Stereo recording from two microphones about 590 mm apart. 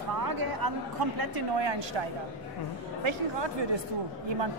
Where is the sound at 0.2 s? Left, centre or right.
Right.